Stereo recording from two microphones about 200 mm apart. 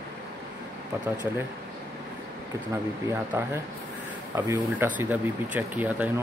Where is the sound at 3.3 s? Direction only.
10° right (ahead or behind).